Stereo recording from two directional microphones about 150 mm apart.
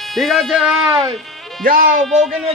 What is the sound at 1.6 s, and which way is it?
Speech, 70° right (ahead or behind).